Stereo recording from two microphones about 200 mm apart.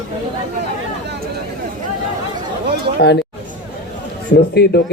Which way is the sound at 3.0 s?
55° left (ahead or behind).